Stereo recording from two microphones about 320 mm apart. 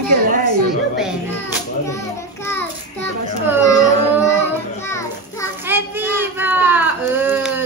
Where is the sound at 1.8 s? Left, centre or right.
Centre.